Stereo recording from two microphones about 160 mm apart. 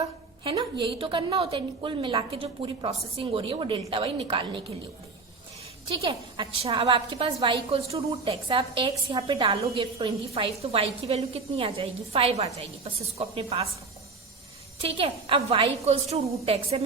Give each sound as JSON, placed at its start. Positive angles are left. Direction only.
{"t": 0.4, "sound": "a woman's voice", "side_deg": -30}
{"t": 6.1, "sound": "a woman's voice", "side_deg": -30}
{"t": 7.3, "sound": "a woman's voice", "side_deg": -20}
{"t": 7.7, "sound": "a woman's voice", "side_deg": -40}
{"t": 14.8, "sound": "a woman's voice", "side_deg": -35}